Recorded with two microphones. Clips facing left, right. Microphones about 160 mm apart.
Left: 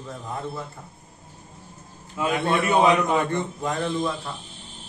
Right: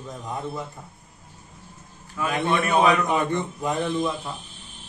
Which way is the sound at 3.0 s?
15° right (ahead or behind).